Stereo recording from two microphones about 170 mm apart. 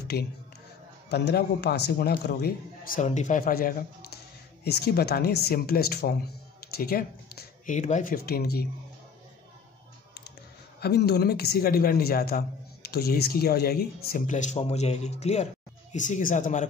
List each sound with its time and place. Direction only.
0.1 s a man's voice: 65° left (ahead or behind)
4.6 s speech: 70° left (ahead or behind)
10.8 s a man's voice: 70° left (ahead or behind)
14.2 s speech: 45° left (ahead or behind)